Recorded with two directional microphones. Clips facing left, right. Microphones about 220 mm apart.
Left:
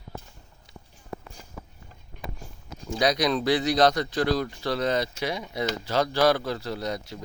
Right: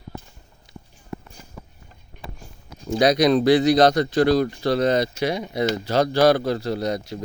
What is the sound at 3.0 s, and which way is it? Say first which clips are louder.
Speech: right 7 dB; 55° right (ahead or behind).